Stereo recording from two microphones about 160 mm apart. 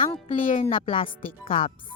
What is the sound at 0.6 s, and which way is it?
Speech, 40° left (ahead or behind).